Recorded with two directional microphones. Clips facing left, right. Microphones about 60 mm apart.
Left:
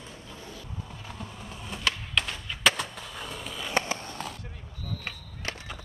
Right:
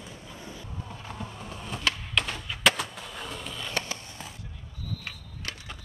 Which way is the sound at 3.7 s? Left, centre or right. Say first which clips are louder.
Left 6 dB; left.